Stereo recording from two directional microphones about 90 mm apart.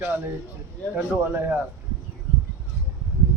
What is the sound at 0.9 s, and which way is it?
Speech, 20° right (ahead or behind).